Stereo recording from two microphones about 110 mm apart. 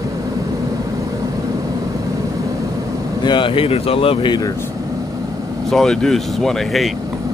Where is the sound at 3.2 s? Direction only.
45° left (ahead or behind).